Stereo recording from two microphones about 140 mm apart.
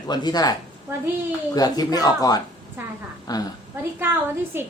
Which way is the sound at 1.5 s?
25° left (ahead or behind).